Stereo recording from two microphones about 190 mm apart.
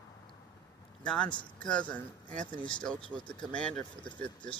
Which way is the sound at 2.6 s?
5° left (ahead or behind).